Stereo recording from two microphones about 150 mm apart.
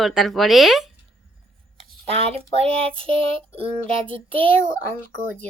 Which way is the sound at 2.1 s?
40° right (ahead or behind).